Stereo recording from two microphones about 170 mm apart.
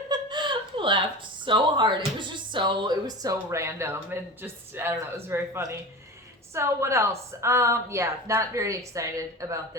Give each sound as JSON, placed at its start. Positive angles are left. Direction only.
{"t": 0.1, "sound": "laughter", "side_deg": -25}
{"t": 1.5, "sound": "a woman's voice", "side_deg": -30}